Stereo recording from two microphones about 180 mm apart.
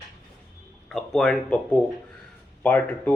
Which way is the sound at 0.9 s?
5° left (ahead or behind).